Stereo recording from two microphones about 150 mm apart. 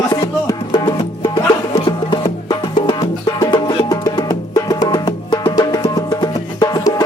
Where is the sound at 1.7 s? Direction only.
40° left (ahead or behind).